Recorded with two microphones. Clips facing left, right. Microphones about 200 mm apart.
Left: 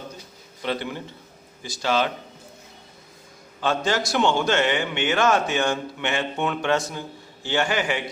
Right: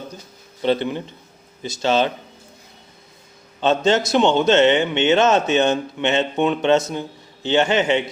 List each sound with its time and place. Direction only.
0.6 s a man's voice: 25° right (ahead or behind)
3.6 s a man's voice: 20° right (ahead or behind)